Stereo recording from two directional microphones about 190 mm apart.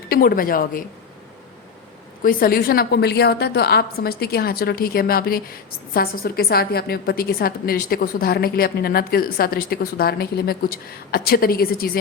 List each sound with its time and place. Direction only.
0.1 s a woman's voice: 50° left (ahead or behind)
2.2 s a woman's voice: 50° left (ahead or behind)